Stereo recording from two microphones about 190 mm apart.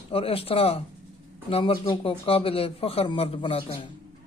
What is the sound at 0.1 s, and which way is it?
A man's voice, 30° left (ahead or behind).